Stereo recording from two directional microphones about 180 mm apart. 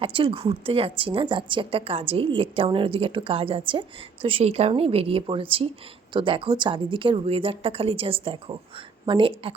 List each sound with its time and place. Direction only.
0.0 s a woman's voice: 30° right (ahead or behind)